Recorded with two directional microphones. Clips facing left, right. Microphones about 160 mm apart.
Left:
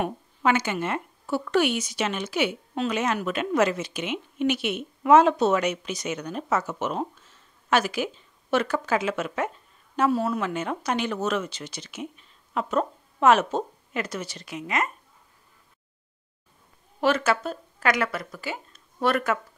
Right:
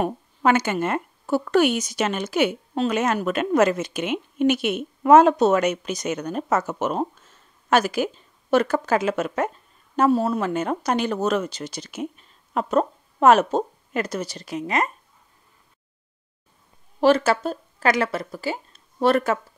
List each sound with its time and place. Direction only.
0.0 s speech: 45° right (ahead or behind)
17.0 s speech: 35° right (ahead or behind)